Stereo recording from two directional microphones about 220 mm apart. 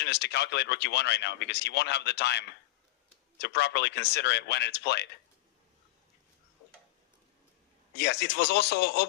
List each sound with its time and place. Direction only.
0.0 s speech: 50° left (ahead or behind)
3.4 s speech: 50° left (ahead or behind)
7.9 s speech: 50° left (ahead or behind)